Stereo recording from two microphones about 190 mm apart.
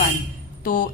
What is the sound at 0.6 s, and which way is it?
Speech, 50° left (ahead or behind).